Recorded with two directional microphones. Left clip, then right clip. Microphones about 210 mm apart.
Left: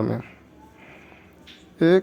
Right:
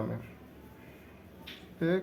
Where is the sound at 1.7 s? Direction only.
55° left (ahead or behind).